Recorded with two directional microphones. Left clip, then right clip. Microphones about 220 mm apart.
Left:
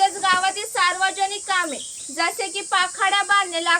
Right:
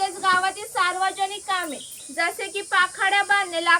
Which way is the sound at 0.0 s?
55° left (ahead or behind).